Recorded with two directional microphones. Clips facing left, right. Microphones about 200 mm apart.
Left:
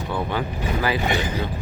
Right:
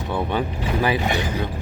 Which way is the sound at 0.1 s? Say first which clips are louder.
Right 3 dB; 20° right (ahead or behind).